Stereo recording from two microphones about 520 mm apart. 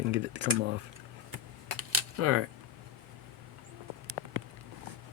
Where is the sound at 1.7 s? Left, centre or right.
Right.